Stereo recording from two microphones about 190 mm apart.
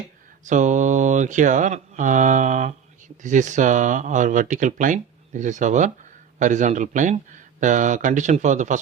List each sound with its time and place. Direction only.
0.4 s speech: 40° right (ahead or behind)